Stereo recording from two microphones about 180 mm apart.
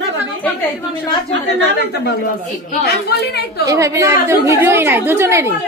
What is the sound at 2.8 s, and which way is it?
Speech, 60° left (ahead or behind).